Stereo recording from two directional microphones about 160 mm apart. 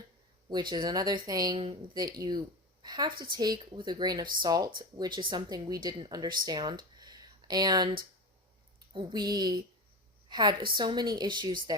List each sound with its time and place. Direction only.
0.5 s speech: 30° right (ahead or behind)
7.0 s a sound: 25° right (ahead or behind)
8.9 s a woman's voice: 30° right (ahead or behind)